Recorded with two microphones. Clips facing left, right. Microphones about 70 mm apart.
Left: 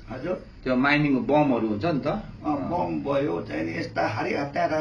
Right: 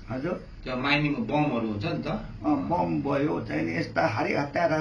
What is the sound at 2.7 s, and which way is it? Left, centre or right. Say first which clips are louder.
Speech: left 1 dB; right.